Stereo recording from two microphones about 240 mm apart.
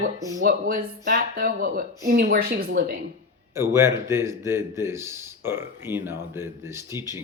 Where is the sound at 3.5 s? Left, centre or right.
Centre.